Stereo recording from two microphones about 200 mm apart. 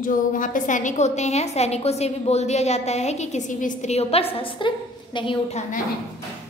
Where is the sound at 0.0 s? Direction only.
40° left (ahead or behind).